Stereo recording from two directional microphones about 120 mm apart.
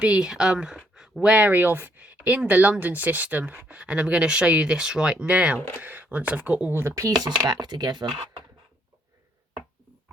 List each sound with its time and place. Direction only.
0.0 s speech: 5° right (ahead or behind)
5.5 s speech: 20° left (ahead or behind)
5.8 s speech: 15° right (ahead or behind); by 8.4 s 40° right (ahead or behind)